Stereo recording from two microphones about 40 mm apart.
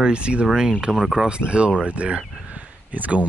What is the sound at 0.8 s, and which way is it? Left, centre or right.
Speech, centre.